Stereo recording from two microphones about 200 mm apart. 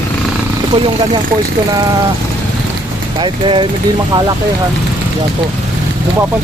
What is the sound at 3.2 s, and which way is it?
Speech, 25° right (ahead or behind).